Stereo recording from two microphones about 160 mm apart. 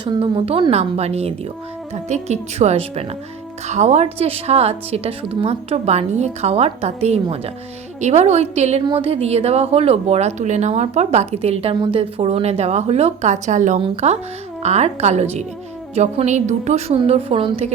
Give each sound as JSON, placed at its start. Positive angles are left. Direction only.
{"t": 0.0, "sound": "a woman's voice", "side_deg": -30}
{"t": 8.8, "sound": "a woman's voice", "side_deg": -30}